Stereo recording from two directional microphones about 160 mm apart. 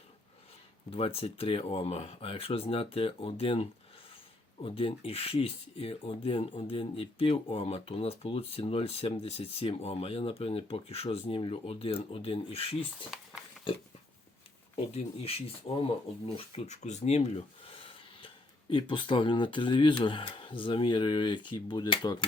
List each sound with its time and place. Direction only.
0.9 s speech: 35° left (ahead or behind)
14.9 s speech: 40° left (ahead or behind)